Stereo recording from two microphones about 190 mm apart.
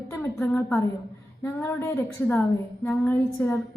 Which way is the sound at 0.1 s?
10° left (ahead or behind).